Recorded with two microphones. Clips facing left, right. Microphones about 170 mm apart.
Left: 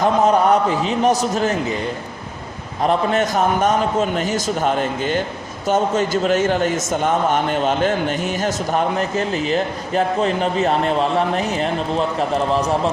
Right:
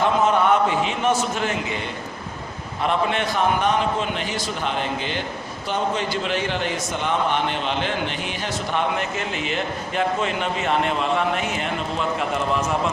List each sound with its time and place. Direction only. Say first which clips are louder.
0.0 s a man's voice: left 4 dB; 40° left (ahead or behind)
2.8 s a man's voice: left 5 dB; 40° left (ahead or behind)